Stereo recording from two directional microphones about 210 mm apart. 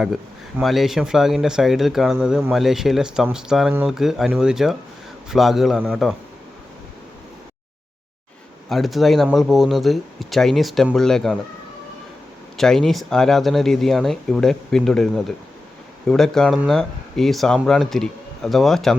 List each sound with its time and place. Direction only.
0.6 s speech: centre (ahead or behind)
8.7 s speech: centre (ahead or behind)
12.5 s speech: centre (ahead or behind)